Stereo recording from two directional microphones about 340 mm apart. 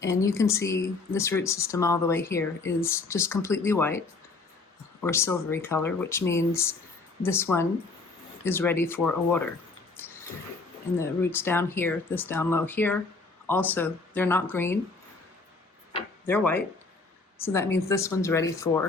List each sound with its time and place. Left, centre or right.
0.0 s speech: centre
5.0 s speech: centre
10.0 s a sound: centre
10.9 s speech: centre
15.9 s tick-tock: centre
16.3 s speech: centre